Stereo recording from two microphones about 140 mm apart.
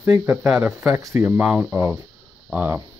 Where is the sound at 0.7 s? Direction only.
20° right (ahead or behind).